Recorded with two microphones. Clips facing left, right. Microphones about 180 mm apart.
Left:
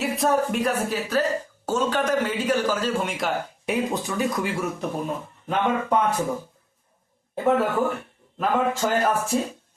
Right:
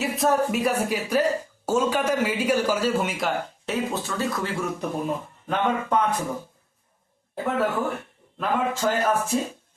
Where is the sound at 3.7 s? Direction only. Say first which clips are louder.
Left 2 dB; 15° left (ahead or behind).